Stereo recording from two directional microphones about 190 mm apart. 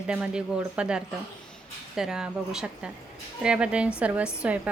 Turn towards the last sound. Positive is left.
turn(degrees=-5)  # may be behind; listen again after turning